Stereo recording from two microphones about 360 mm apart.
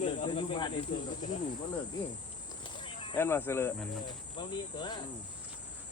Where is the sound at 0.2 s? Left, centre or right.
Centre.